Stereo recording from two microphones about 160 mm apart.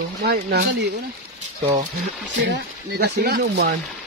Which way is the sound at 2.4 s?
90° right.